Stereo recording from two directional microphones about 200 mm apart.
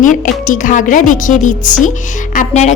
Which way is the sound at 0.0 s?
40° left (ahead or behind).